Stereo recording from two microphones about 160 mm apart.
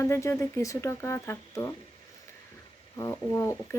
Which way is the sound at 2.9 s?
20° left (ahead or behind).